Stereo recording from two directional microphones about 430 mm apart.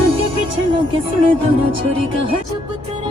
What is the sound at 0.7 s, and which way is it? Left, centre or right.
Music, centre.